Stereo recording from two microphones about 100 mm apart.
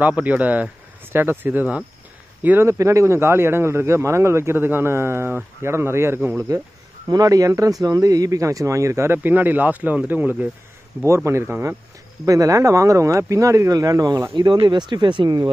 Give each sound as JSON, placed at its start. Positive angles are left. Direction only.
{"t": 0.0, "sound": "a man's voice", "side_deg": -15}
{"t": 7.1, "sound": "a man's voice", "side_deg": -40}